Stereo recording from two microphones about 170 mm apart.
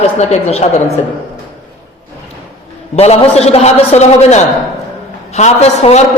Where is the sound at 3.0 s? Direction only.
40° left (ahead or behind).